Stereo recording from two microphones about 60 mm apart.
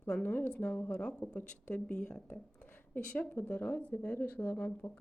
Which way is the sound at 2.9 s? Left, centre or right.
Left.